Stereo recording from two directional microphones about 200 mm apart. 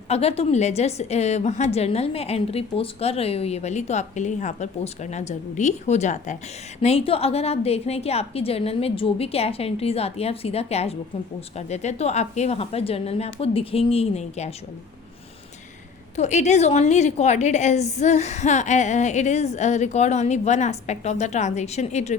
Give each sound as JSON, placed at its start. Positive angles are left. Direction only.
{"t": 0.1, "sound": "a woman's voice", "side_deg": 30}
{"t": 16.1, "sound": "a woman's voice", "side_deg": 35}